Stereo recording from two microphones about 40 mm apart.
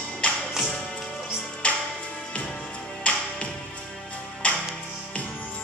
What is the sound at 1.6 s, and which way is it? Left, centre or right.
Music, left.